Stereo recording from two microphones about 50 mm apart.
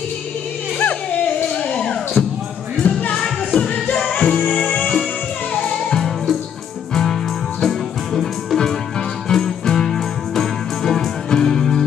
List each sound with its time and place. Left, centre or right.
0.7 s music: left
1.7 s music: left
5.5 s music: left
5.9 s music: centre